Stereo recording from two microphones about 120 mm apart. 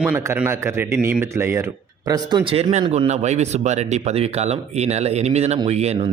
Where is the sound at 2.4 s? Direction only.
45° right (ahead or behind).